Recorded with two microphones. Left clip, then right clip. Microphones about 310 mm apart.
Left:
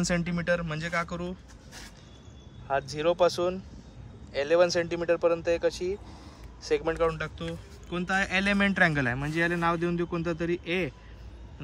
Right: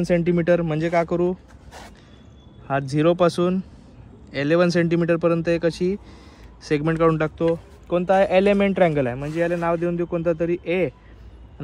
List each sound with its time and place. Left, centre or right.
0.0 s a man's voice: centre
2.7 s a man's voice: right